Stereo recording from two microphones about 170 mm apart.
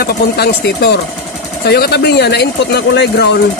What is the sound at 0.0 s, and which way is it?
Speech, 70° left (ahead or behind).